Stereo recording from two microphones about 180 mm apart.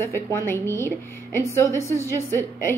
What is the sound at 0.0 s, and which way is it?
A woman's voice, 15° left (ahead or behind).